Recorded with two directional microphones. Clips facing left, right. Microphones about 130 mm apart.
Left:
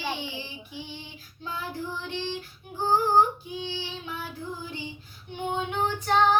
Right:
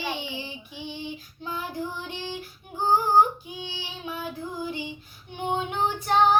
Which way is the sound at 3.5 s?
15° right (ahead or behind).